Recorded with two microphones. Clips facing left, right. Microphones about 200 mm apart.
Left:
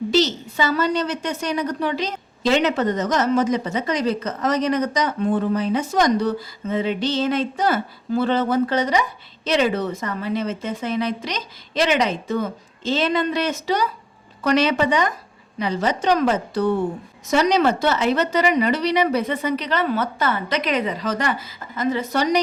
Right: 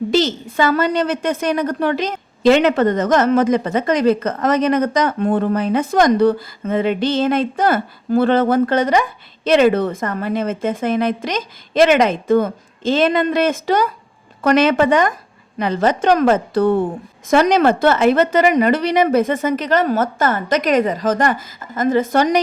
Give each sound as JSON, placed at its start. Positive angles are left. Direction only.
{"t": 0.1, "sound": "a woman's voice", "side_deg": -50}